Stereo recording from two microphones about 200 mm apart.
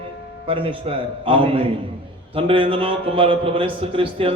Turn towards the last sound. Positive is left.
turn(degrees=-25)  # may be behind; listen again after turning